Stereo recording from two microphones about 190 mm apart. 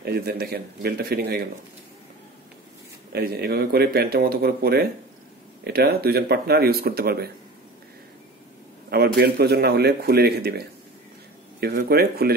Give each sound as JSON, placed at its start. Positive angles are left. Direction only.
{"t": 0.0, "sound": "speech", "side_deg": -55}
{"t": 3.1, "sound": "speech", "side_deg": -55}
{"t": 8.9, "sound": "speech", "side_deg": -60}
{"t": 11.6, "sound": "speech", "side_deg": -55}